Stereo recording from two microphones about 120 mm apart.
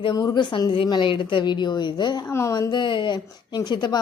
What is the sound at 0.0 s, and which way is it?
A woman's voice, 35° left (ahead or behind).